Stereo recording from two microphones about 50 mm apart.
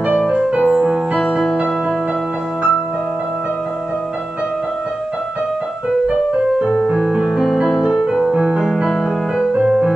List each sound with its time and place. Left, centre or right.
0.7 s music: centre
6.9 s music: centre